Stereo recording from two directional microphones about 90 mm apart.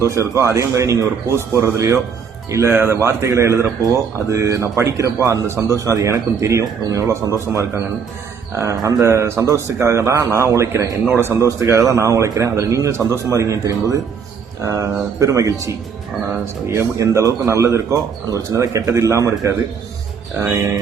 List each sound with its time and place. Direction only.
0.0 s speech: 35° right (ahead or behind)